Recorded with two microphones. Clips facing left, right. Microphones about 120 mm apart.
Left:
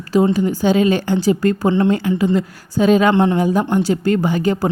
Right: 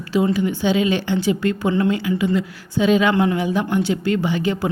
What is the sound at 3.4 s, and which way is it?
A woman's voice, 45° left (ahead or behind).